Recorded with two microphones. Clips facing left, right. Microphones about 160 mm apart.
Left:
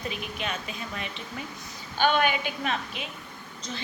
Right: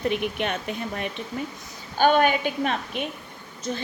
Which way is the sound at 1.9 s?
40° right (ahead or behind).